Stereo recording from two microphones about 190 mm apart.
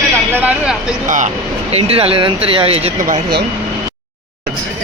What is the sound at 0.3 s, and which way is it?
Speech, 5° right (ahead or behind).